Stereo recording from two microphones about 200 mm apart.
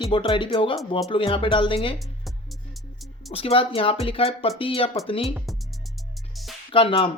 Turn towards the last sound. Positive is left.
turn(degrees=25)  # may be behind; listen again after turning